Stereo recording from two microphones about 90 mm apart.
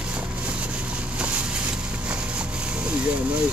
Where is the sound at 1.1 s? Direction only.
15° right (ahead or behind).